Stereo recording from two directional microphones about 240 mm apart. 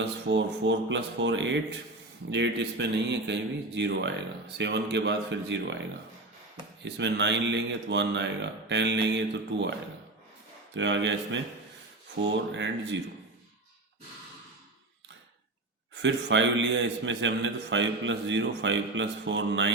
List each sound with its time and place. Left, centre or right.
0.0 s a man's voice: right
6.8 s a man's voice: right
10.8 s a man's voice: right
12.5 s a man's voice: right
16.0 s a man's voice: right